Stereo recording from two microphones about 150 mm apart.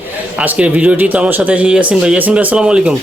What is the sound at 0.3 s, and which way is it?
Speech, 10° right (ahead or behind).